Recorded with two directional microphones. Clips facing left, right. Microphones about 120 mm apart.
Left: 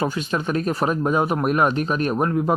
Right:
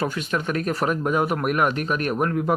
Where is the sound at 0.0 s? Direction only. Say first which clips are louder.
Left 2 dB; 25° left (ahead or behind).